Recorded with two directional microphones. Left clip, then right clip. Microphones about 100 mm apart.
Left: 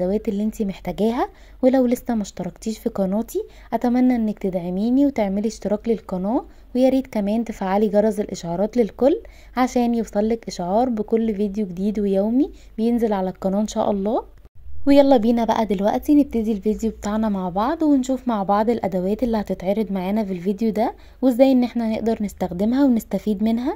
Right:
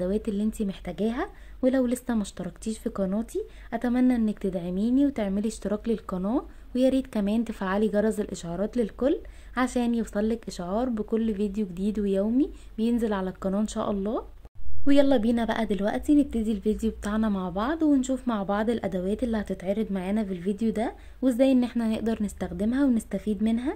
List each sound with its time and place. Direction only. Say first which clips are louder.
0.0 s a woman's voice: left 6 dB; 25° left (ahead or behind)
22.4 s a woman's voice: left 7 dB; 55° left (ahead or behind)